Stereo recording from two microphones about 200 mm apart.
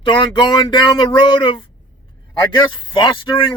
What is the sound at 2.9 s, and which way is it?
Speech, 25° left (ahead or behind).